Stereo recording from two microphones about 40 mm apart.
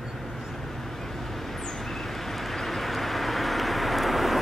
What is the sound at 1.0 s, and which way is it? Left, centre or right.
Vehicle, centre.